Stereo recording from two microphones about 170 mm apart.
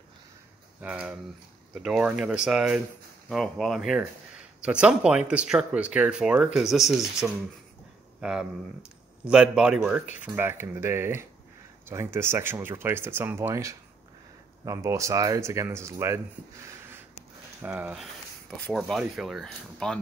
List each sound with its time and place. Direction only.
0.7 s speech: 5° right (ahead or behind)
17.6 s speech: 10° right (ahead or behind)
18.6 s speech: centre (ahead or behind)